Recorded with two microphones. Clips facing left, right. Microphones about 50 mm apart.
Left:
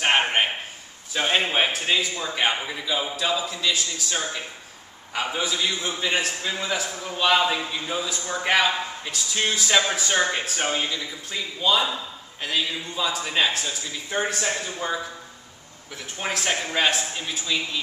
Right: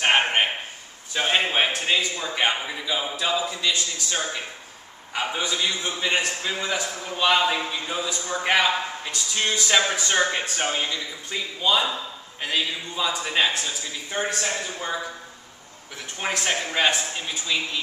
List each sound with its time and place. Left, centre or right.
0.0 s a sound: centre
1.1 s a man's voice: centre
16.2 s a man's voice: centre